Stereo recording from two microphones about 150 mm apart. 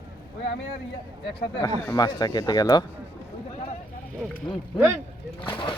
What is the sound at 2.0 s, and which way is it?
Speech, 25° left (ahead or behind).